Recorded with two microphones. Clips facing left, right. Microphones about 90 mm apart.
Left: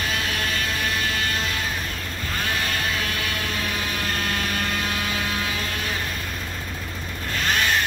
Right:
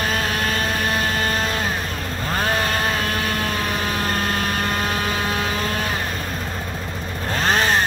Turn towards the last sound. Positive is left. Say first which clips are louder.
# right 4 dB
turn(degrees=-35)  # may be behind; listen again after turning